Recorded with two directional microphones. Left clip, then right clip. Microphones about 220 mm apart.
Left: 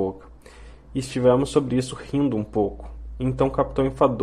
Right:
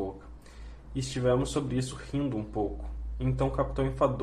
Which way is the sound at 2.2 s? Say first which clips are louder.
Left 9 dB; 35° left (ahead or behind).